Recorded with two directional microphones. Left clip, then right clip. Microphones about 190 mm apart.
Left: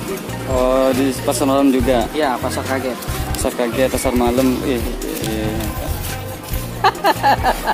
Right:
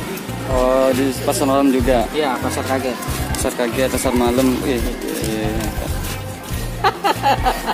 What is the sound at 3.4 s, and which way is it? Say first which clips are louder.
Speech: left 2 dB; 10° left (ahead or behind).